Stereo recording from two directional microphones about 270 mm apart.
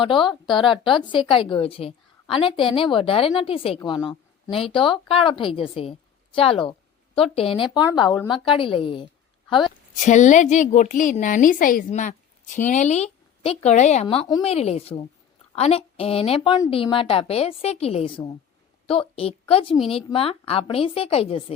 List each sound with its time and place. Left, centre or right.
0.0 s a woman's voice: centre
10.0 s a woman's voice: left